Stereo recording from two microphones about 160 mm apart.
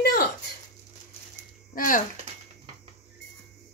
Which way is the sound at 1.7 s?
60° left (ahead or behind).